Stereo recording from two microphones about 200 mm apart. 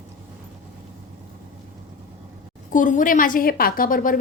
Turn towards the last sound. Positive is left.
turn(degrees=45)  # may be behind; listen again after turning